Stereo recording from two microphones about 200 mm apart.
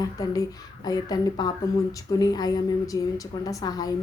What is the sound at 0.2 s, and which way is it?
Speech, 15° left (ahead or behind).